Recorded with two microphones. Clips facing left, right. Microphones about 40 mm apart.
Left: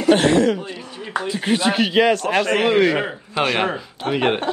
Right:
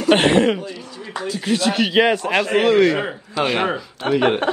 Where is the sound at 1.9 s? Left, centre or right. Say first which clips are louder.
Even; centre.